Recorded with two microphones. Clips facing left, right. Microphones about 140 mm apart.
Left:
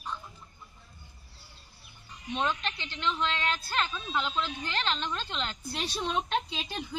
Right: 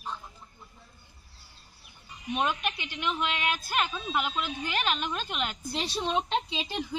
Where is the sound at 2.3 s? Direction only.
15° right (ahead or behind).